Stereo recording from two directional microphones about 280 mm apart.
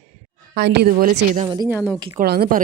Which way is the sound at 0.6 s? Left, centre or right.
Right.